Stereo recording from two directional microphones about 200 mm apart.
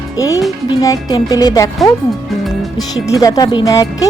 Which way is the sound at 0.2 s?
15° left (ahead or behind).